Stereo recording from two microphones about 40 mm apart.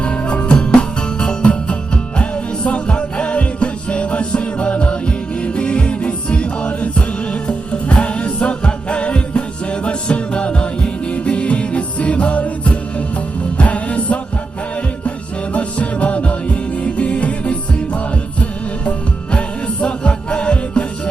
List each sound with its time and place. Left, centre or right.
0.0 s music: left
15.5 s music: left